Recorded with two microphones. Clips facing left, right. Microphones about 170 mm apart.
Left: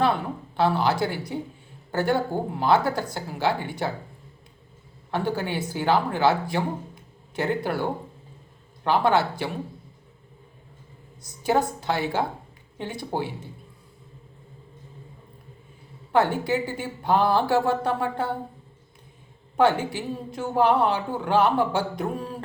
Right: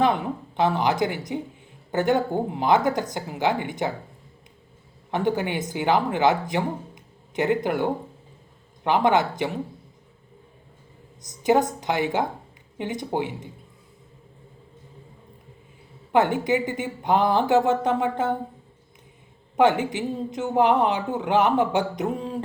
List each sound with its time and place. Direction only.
0.0 s a woman's voice: 20° right (ahead or behind)
5.1 s speech: 20° right (ahead or behind)
11.2 s speech: 20° right (ahead or behind)
16.1 s a man's voice: 20° right (ahead or behind)
19.5 s a man's voice: 20° right (ahead or behind)